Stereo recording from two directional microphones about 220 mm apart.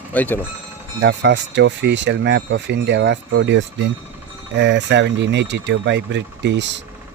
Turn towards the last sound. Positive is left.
turn(degrees=-55)  # may be behind; listen again after turning